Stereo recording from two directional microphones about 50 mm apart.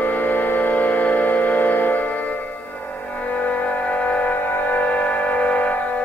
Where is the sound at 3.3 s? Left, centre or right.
Left.